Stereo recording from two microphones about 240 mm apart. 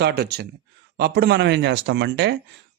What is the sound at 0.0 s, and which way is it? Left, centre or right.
A man's voice, right.